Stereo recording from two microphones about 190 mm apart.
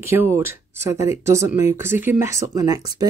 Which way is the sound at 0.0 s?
15° right (ahead or behind).